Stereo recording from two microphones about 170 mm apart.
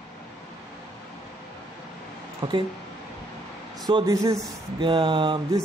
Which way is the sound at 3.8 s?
20° right (ahead or behind).